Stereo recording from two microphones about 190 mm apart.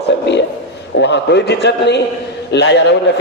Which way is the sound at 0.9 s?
65° left (ahead or behind).